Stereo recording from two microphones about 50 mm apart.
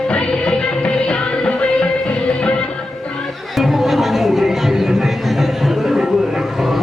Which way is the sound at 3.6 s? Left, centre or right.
Centre.